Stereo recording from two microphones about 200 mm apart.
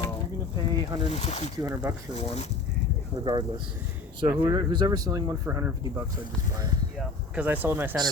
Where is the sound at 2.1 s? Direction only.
30° left (ahead or behind).